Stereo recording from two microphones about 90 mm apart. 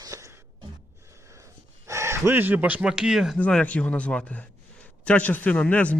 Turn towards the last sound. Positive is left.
turn(degrees=15)  # may be behind; listen again after turning